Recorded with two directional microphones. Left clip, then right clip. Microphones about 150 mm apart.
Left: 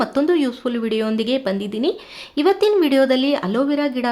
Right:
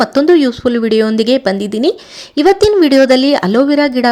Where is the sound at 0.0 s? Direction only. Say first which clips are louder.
Right 9 dB; 40° right (ahead or behind).